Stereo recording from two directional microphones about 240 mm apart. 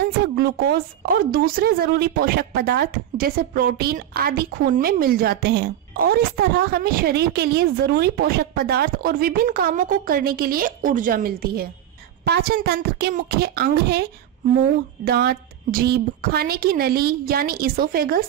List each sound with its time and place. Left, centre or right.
0.0 s a woman's voice: right
15.0 s a woman's voice: right